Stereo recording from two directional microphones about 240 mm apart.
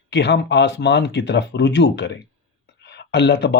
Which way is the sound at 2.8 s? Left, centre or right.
Left.